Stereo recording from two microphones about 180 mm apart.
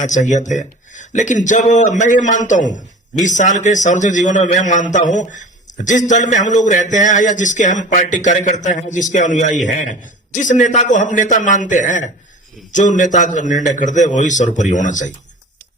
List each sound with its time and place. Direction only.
0.0 s a man's voice: 45° left (ahead or behind)